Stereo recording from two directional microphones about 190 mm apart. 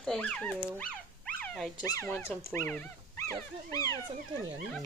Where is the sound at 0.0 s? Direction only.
5° left (ahead or behind).